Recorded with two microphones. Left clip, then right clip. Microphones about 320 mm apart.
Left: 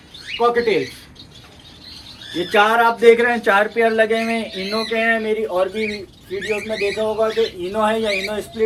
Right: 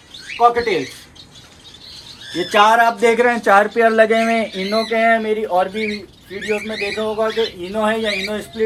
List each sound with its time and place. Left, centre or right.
0.4 s speech: centre
2.3 s a man's voice: right
5.5 s speech: centre